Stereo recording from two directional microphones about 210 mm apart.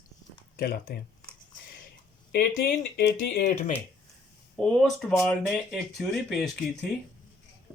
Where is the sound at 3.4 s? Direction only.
35° left (ahead or behind).